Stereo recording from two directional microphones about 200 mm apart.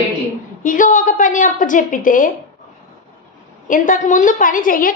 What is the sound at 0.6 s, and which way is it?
A woman's voice, 40° left (ahead or behind).